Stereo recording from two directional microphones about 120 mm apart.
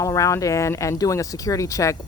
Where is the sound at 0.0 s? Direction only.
25° left (ahead or behind).